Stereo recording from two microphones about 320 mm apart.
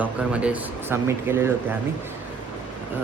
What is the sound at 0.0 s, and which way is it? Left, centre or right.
Speech, centre.